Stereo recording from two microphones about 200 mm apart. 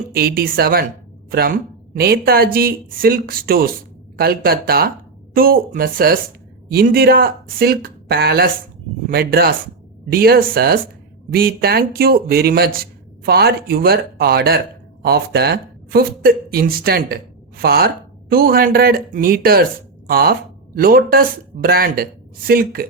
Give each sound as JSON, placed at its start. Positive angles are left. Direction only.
{"t": 0.1, "sound": "speech", "side_deg": -50}